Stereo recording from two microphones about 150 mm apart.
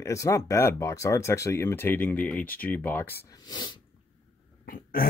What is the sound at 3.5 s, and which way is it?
Speech, 30° left (ahead or behind).